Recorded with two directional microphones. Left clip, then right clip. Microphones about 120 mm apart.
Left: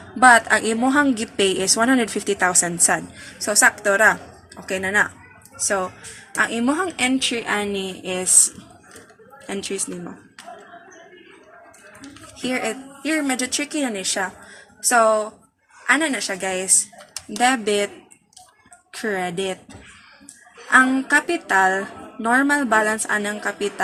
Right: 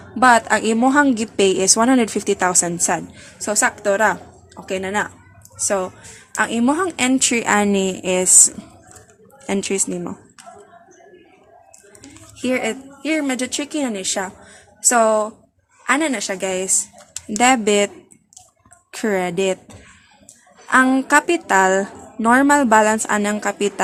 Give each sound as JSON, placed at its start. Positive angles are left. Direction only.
{"t": 0.2, "sound": "a woman's voice", "side_deg": -30}
{"t": 5.6, "sound": "a woman's voice", "side_deg": -40}
{"t": 9.5, "sound": "speech", "side_deg": -60}
{"t": 12.4, "sound": "a woman's voice", "side_deg": -45}